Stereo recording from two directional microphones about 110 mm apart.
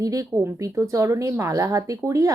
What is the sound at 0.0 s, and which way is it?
Speech, 30° right (ahead or behind).